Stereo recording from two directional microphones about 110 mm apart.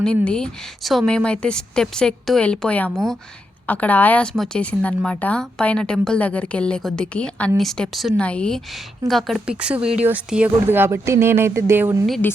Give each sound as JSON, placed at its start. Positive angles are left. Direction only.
{"t": 0.0, "sound": "a woman's voice", "side_deg": 10}
{"t": 9.6, "sound": "speech", "side_deg": -10}
{"t": 10.7, "sound": "speech", "side_deg": -20}